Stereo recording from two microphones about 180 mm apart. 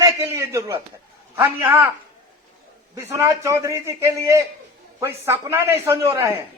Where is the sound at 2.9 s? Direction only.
15° right (ahead or behind).